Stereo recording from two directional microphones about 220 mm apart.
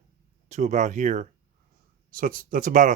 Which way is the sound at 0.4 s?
30° right (ahead or behind).